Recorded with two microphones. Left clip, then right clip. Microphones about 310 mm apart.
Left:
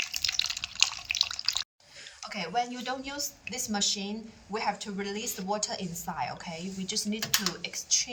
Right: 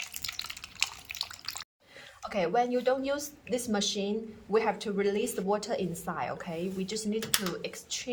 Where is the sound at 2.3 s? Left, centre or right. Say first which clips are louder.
Right 4 dB; centre.